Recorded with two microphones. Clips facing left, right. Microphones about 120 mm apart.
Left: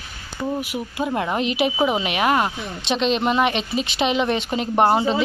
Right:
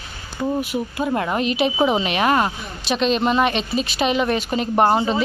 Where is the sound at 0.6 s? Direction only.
15° left (ahead or behind).